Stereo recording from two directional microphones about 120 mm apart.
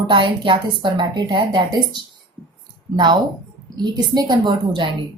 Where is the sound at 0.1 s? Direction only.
45° right (ahead or behind).